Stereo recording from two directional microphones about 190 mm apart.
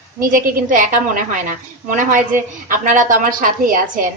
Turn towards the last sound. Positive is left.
turn(degrees=-45)  # may be behind; listen again after turning